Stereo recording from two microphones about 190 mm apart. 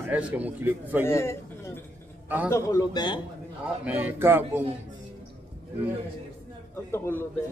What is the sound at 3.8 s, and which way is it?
Speech, 10° right (ahead or behind).